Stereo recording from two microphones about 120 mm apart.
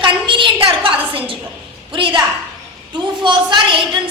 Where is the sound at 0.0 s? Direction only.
45° right (ahead or behind).